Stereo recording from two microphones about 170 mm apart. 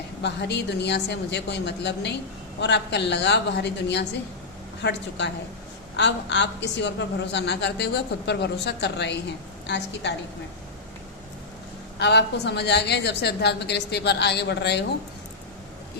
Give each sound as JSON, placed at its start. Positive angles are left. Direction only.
{"t": 0.2, "sound": "a woman's voice", "side_deg": 90}
{"t": 11.9, "sound": "a woman's voice", "side_deg": 85}